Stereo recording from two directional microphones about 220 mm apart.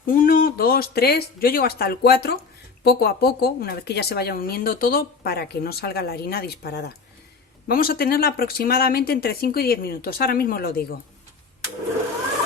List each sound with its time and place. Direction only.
0.0 s speech: 40° left (ahead or behind)